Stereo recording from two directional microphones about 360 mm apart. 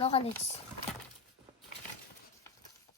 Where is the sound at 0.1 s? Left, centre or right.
Centre.